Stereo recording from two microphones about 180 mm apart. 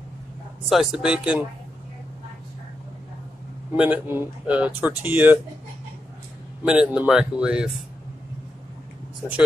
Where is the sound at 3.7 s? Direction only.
10° right (ahead or behind).